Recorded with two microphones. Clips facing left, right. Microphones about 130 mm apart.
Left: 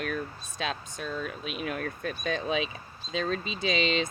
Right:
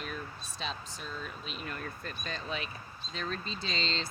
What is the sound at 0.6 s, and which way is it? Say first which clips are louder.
Speech: left 7 dB; 65° left (ahead or behind).